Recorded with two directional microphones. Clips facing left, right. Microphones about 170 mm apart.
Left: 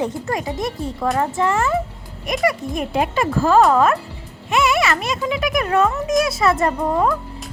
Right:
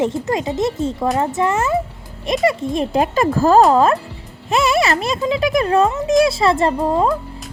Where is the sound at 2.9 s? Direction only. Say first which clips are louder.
Right 2 dB; 40° right (ahead or behind).